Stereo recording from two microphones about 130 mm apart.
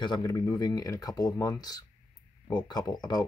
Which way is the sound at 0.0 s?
30° left (ahead or behind).